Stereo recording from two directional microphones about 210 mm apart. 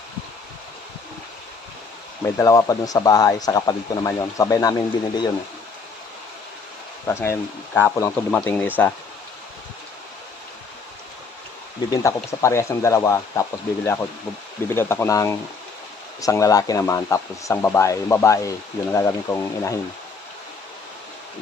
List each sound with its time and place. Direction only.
2.2 s speech: 15° left (ahead or behind)
7.1 s speech: 10° left (ahead or behind)
11.9 s speech: 15° left (ahead or behind)